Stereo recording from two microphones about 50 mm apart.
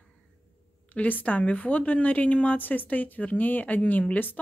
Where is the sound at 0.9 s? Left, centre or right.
Left.